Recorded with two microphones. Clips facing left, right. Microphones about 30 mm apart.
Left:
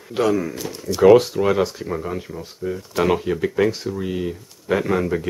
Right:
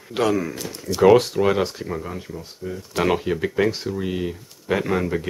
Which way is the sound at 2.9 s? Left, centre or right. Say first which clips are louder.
Left 1 dB; centre.